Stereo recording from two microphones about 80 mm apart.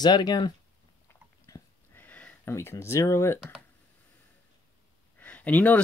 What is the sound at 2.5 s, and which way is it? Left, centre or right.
Speech, left.